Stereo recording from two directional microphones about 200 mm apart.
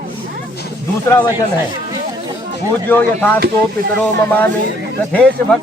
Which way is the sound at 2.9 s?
10° left (ahead or behind).